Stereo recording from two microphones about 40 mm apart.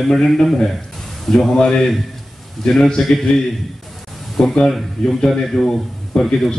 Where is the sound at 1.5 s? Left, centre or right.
Left.